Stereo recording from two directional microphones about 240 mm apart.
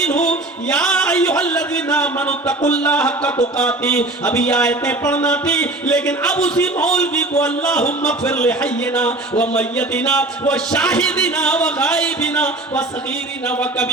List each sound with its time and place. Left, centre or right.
0.0 s music: centre
2.6 s speech: centre